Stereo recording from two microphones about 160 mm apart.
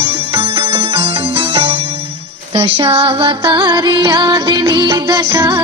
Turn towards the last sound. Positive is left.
turn(degrees=-15)  # may be behind; listen again after turning